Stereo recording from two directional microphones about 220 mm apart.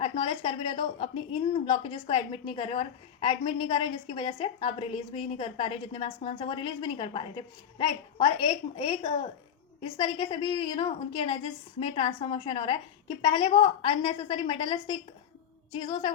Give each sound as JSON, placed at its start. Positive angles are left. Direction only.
{"t": 0.0, "sound": "a woman's voice", "side_deg": 25}